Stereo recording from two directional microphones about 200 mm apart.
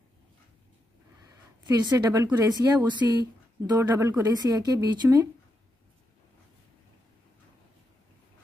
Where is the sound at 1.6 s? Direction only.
20° right (ahead or behind).